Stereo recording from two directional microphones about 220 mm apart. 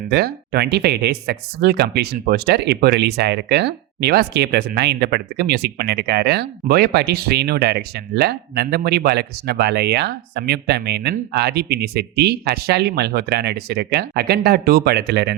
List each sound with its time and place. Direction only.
0.1 s speech: 45° right (ahead or behind)